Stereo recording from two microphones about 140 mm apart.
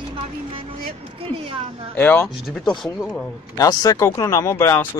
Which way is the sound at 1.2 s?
40° right (ahead or behind).